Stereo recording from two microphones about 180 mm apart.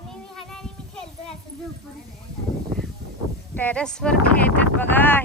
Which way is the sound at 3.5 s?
10° left (ahead or behind).